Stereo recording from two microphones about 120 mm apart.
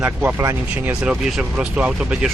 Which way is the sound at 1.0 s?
5° right (ahead or behind).